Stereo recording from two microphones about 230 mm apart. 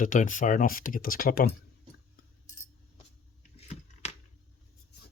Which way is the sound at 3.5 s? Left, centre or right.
Left.